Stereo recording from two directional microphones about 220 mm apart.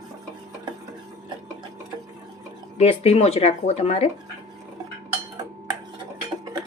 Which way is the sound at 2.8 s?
30° left (ahead or behind).